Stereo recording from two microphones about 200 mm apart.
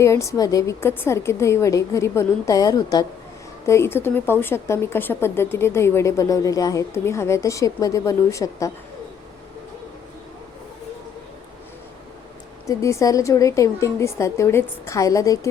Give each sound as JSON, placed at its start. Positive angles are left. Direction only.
{"t": 0.0, "sound": "speech", "side_deg": 15}
{"t": 12.6, "sound": "speech", "side_deg": 15}